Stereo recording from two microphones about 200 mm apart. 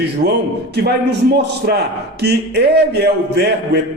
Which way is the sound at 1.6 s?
45° right (ahead or behind).